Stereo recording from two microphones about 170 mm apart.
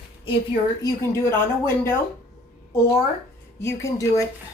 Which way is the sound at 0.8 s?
15° left (ahead or behind).